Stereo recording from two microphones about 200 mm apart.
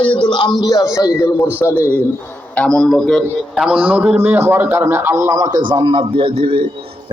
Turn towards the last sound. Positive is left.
turn(degrees=-25)  # may be behind; listen again after turning